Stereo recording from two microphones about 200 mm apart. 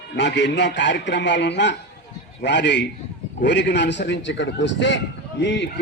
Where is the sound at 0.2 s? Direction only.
60° left (ahead or behind).